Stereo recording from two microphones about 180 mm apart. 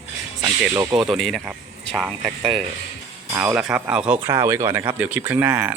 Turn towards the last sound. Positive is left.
turn(degrees=-10)  # may be behind; listen again after turning